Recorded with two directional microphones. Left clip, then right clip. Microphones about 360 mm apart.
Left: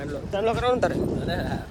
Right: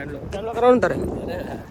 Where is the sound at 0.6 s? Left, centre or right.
Centre.